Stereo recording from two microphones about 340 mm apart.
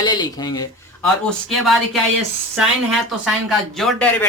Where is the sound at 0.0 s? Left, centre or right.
Centre.